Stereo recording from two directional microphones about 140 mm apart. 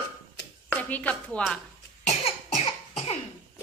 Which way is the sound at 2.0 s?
50° left (ahead or behind).